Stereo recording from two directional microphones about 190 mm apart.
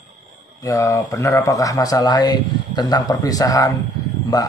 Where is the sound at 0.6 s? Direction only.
15° left (ahead or behind).